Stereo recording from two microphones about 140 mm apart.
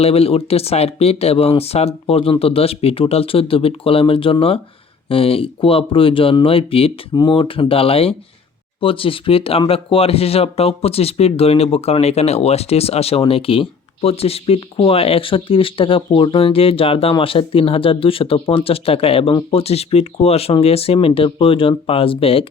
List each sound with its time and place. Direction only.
0.0 s speech: 45° left (ahead or behind)